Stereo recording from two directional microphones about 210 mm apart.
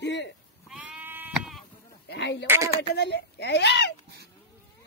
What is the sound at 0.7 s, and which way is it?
Sheep, 5° right (ahead or behind).